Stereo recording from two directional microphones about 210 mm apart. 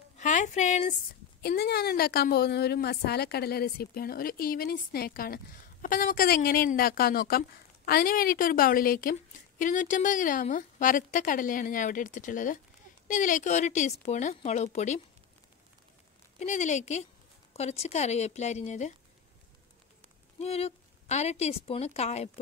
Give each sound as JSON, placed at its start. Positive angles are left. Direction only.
{"t": 0.2, "sound": "speech", "side_deg": 35}
{"t": 1.4, "sound": "a woman's voice", "side_deg": 50}
{"t": 16.3, "sound": "a woman's voice", "side_deg": 35}
{"t": 20.3, "sound": "a woman's voice", "side_deg": 30}